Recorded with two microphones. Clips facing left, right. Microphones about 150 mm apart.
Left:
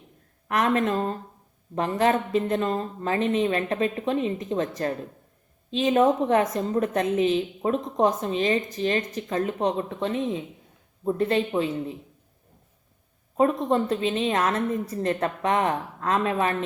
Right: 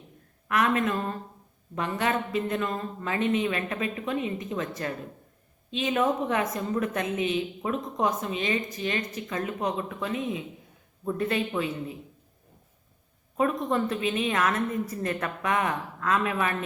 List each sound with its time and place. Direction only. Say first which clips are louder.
0.4 s a woman's voice: left 2 dB; 35° left (ahead or behind)
13.3 s a woman's voice: left 4 dB; 30° left (ahead or behind)